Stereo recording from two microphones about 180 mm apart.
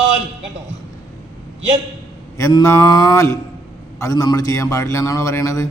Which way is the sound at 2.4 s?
20° left (ahead or behind).